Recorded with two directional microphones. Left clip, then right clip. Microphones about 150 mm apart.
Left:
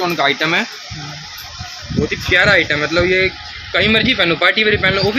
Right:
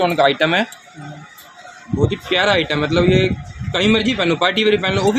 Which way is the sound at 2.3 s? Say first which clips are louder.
Left 5 dB; 90° right.